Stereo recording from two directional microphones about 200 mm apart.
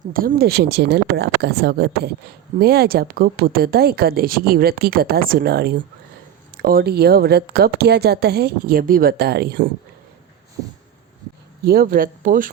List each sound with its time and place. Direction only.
0.1 s speech: 45° right (ahead or behind)
11.6 s speech: 50° right (ahead or behind)